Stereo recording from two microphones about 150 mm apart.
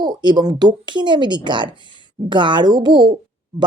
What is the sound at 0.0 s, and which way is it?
Speech, 30° right (ahead or behind).